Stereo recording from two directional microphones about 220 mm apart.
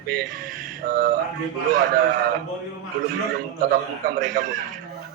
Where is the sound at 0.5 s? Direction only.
40° right (ahead or behind).